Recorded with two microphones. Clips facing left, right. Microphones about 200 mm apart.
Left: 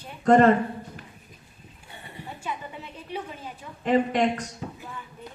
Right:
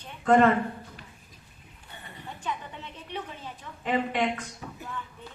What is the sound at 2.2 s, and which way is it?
A woman's voice, 10° left (ahead or behind).